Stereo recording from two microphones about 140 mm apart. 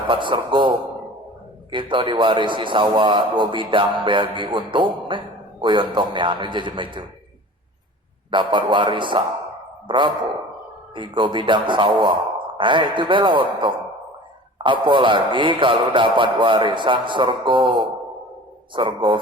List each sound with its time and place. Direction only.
0.1 s a man's voice: 35° right (ahead or behind)
1.7 s a man's voice: 35° right (ahead or behind)
8.3 s a man's voice: 35° right (ahead or behind)
18.7 s a man's voice: 35° right (ahead or behind)